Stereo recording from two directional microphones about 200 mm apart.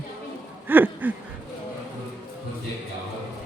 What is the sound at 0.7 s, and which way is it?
Speech, 10° right (ahead or behind).